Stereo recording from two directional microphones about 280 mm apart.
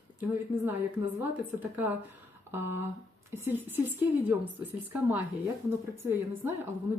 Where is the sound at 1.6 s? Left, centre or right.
Centre.